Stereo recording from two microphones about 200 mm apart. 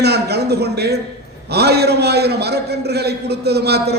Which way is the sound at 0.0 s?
55° right (ahead or behind).